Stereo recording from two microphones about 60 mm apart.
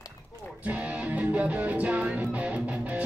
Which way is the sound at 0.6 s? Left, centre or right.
Right.